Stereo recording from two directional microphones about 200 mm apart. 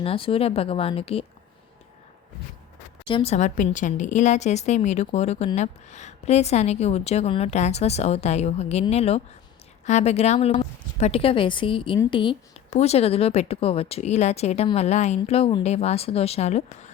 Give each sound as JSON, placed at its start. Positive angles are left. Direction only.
{"t": 0.0, "sound": "speech", "side_deg": 30}
{"t": 3.1, "sound": "a woman's voice", "side_deg": 30}